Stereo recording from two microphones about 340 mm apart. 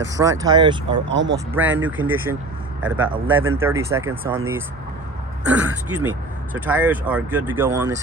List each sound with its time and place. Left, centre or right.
0.2 s speech: centre
1.0 s speech: right
1.5 s speech: centre
5.5 s speech: centre